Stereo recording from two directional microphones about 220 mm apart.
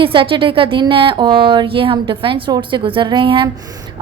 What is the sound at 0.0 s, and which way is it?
A woman's voice, 25° right (ahead or behind).